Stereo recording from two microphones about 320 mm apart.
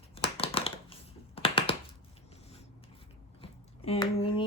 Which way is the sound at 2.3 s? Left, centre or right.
Centre.